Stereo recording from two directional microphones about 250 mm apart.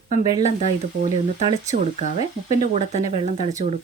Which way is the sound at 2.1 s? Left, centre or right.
Left.